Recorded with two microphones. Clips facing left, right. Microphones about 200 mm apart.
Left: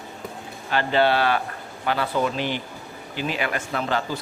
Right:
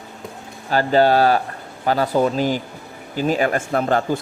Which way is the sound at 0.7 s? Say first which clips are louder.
Right 5 dB; 40° right (ahead or behind).